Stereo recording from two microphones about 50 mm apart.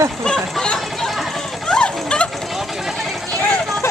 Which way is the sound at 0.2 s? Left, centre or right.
Centre.